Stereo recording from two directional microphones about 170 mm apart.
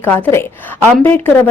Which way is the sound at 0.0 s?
15° left (ahead or behind).